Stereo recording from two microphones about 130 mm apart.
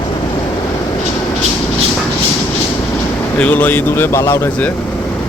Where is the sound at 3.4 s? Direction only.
15° left (ahead or behind).